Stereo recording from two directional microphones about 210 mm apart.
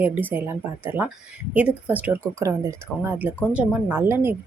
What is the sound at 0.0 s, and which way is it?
A woman's voice, 10° right (ahead or behind).